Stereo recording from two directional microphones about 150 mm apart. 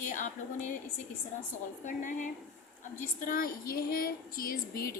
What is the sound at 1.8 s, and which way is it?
Speech, 55° left (ahead or behind).